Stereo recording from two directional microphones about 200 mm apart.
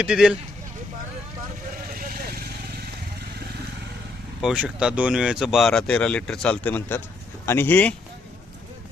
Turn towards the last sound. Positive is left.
turn(degrees=10)  # may be behind; listen again after turning